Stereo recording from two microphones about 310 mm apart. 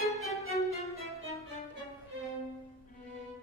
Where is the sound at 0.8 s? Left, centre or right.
Centre.